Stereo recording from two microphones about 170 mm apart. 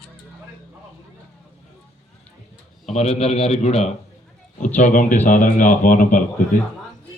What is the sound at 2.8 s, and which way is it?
A man's voice, 40° left (ahead or behind).